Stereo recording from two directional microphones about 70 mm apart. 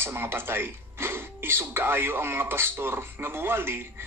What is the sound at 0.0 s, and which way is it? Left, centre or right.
Speech, right.